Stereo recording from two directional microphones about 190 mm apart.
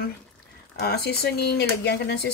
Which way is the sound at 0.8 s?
55° left (ahead or behind).